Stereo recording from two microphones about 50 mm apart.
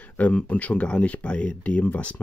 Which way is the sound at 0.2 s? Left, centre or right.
Left.